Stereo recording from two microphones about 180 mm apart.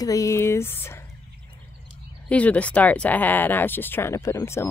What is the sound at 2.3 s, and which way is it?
Speech, 5° left (ahead or behind).